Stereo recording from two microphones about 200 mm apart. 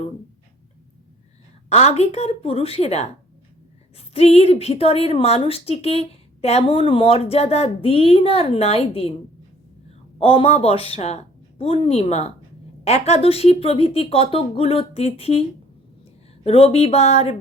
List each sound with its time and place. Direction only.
1.7 s a woman's voice: 30° left (ahead or behind)
10.2 s a woman's voice: 30° left (ahead or behind)